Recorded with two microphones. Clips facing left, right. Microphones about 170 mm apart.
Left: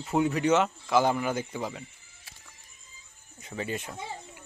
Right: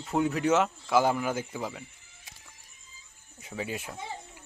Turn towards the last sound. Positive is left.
turn(degrees=-5)  # may be behind; listen again after turning